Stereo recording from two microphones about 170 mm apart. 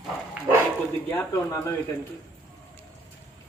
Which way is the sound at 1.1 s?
20° left (ahead or behind).